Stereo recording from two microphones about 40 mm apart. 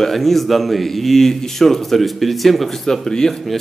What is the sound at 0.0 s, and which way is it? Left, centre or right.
A man's voice, centre.